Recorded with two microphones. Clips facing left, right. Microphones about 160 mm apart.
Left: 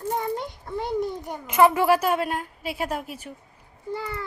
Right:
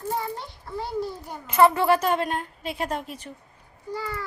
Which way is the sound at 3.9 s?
25° left (ahead or behind).